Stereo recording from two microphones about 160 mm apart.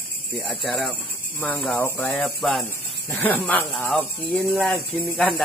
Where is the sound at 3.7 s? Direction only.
Centre (ahead or behind).